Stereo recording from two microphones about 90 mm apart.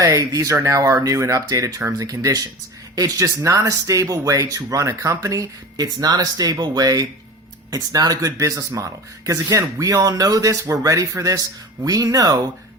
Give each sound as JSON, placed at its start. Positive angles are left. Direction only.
{"t": 0.0, "sound": "speech", "side_deg": -40}